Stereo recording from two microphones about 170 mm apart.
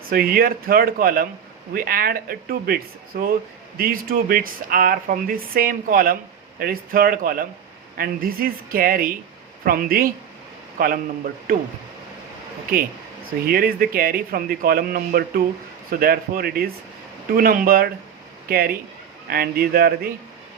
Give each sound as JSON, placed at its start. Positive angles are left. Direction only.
{"t": 0.1, "sound": "a man's voice", "side_deg": -60}
{"t": 13.5, "sound": "speech", "side_deg": -60}